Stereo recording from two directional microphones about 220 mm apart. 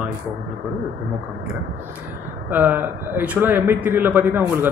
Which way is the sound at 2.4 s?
10° right (ahead or behind).